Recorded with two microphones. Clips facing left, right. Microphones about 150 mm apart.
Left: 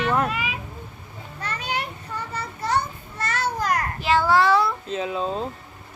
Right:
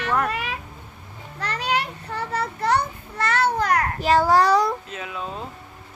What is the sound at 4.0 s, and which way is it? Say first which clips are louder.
Speech: right 1 dB; 40° right (ahead or behind).